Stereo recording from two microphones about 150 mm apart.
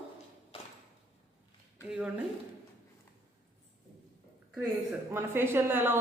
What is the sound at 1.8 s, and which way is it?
Speech, 5° right (ahead or behind).